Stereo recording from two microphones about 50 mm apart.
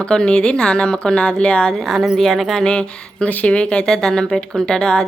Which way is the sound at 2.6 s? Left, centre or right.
Centre.